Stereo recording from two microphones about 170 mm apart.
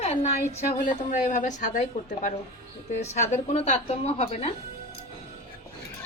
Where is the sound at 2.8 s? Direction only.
40° left (ahead or behind).